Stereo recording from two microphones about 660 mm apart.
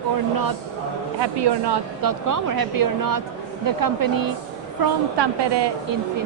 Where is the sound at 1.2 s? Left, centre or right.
Right.